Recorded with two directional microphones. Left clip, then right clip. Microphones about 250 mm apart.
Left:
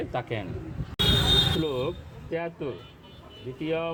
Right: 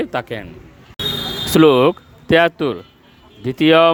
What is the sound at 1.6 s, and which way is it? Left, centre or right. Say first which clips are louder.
Speech: right 18 dB; right.